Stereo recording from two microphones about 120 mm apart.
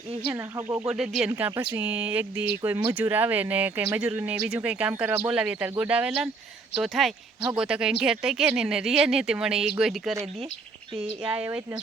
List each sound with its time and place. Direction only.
0.3 s speech: 20° right (ahead or behind)
0.9 s speech: 5° right (ahead or behind)
1.4 s speech: 15° right (ahead or behind)
11.3 s speech: 15° right (ahead or behind)